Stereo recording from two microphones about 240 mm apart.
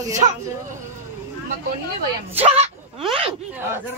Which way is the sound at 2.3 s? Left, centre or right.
Right.